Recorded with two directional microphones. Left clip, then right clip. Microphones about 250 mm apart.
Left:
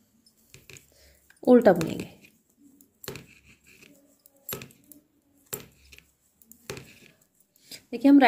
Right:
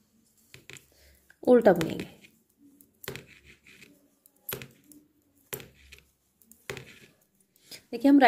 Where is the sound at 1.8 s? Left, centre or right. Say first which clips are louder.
Even; centre.